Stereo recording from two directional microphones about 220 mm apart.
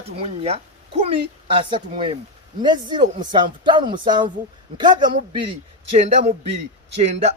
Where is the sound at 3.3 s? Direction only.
20° right (ahead or behind).